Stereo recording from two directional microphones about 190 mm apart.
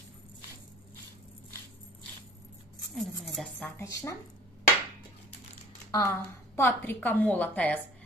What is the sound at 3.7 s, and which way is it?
Speech, 15° left (ahead or behind).